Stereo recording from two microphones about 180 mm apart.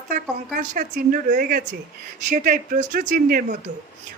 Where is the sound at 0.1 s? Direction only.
50° right (ahead or behind).